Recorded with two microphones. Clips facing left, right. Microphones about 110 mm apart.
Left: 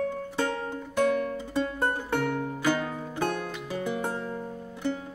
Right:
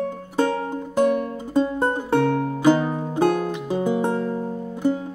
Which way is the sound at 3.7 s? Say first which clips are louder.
Right 9 dB; 20° right (ahead or behind).